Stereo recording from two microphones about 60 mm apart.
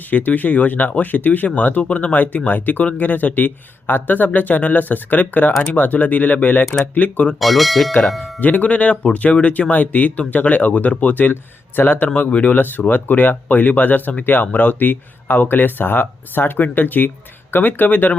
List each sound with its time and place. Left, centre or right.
0.1 s speech: left
7.3 s speech: centre
8.4 s speech: left